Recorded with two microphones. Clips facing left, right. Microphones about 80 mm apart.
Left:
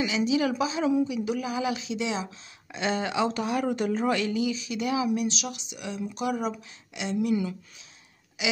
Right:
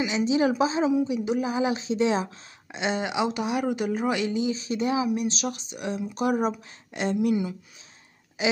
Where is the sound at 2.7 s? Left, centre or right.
Centre; by 7.1 s right.